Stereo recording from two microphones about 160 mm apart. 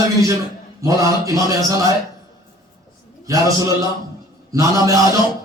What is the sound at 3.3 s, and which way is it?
A man's voice, 20° right (ahead or behind).